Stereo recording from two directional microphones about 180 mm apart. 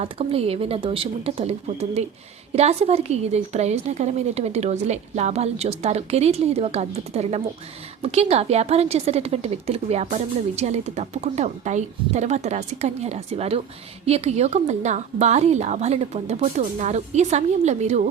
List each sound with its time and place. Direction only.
0.0 s a woman's voice: 35° right (ahead or behind)